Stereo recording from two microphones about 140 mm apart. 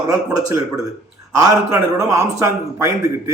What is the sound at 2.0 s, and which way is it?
Speech, 25° right (ahead or behind).